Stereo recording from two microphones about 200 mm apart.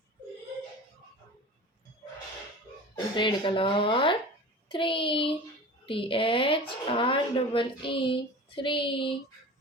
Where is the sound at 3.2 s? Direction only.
25° left (ahead or behind).